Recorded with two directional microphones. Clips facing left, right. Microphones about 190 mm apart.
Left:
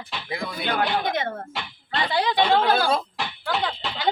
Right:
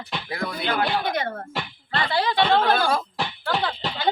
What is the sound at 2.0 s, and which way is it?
Snicker, 20° left (ahead or behind).